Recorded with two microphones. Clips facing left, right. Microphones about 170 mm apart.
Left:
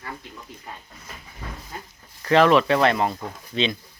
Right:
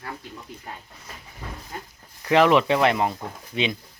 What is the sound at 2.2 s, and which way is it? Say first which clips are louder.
Speech: left 1 dB; 15° right (ahead or behind).